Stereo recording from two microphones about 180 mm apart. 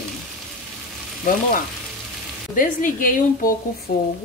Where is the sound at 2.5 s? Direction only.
50° left (ahead or behind).